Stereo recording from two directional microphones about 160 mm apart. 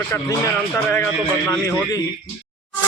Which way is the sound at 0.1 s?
15° left (ahead or behind).